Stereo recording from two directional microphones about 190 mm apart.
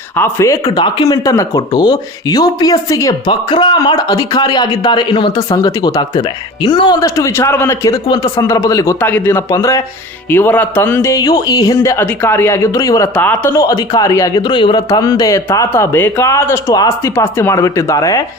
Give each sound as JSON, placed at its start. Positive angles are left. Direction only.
{"t": 0.2, "sound": "a man's voice", "side_deg": 15}